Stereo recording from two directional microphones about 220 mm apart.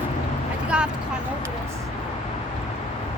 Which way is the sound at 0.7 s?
5° right (ahead or behind).